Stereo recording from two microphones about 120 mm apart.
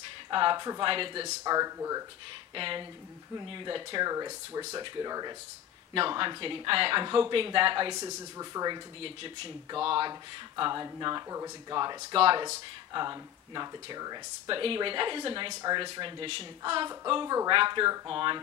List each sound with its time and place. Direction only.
0.3 s speech: 40° right (ahead or behind)
0.8 s speech: 45° right (ahead or behind)
1.4 s speech: 30° right (ahead or behind)
2.5 s speech: 45° right (ahead or behind)
5.9 s speech: 45° right (ahead or behind)
9.0 s speech: 50° right (ahead or behind)
10.5 s speech: 35° right (ahead or behind)
12.2 s speech: 45° right (ahead or behind)
12.9 s speech: 35° right (ahead or behind)
17.1 s speech: 30° right (ahead or behind)